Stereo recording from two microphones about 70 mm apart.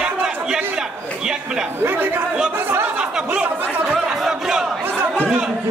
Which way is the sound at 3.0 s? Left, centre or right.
Centre.